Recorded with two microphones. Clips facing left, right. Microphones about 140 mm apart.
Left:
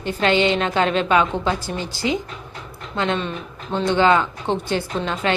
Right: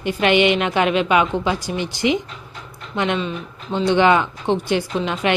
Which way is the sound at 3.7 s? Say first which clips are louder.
Right 1 dB; 15° right (ahead or behind).